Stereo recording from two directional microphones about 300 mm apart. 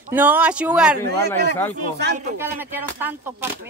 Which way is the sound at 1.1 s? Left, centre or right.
Right.